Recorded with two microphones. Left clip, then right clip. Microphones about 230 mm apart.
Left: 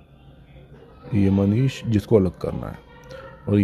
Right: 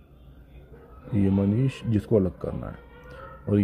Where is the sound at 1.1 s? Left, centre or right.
Centre.